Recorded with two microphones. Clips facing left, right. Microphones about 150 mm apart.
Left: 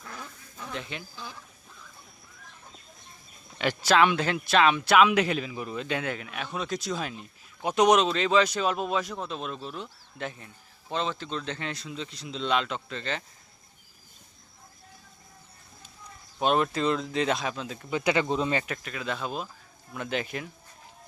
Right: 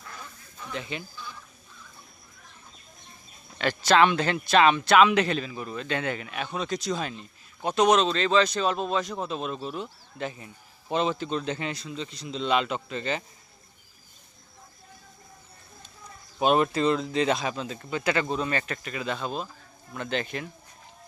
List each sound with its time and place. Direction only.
0.7 s a man's voice: centre (ahead or behind)
3.6 s speech: 10° left (ahead or behind)
6.0 s speech: centre (ahead or behind)
9.1 s a man's voice: 5° right (ahead or behind)
16.4 s a man's voice: 5° right (ahead or behind)
17.9 s speech: 15° left (ahead or behind)
18.7 s a man's voice: centre (ahead or behind)